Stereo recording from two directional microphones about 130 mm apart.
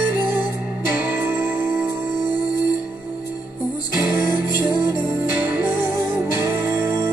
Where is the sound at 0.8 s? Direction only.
15° right (ahead or behind).